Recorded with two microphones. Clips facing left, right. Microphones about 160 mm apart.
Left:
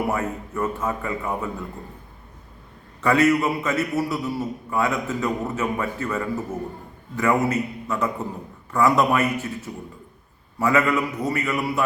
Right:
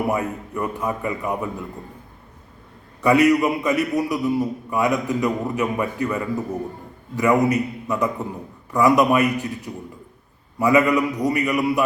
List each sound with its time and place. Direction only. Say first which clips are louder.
0.1 s a man's voice: right 2 dB; 15° right (ahead or behind)
3.0 s a man's voice: right 3 dB; 15° right (ahead or behind)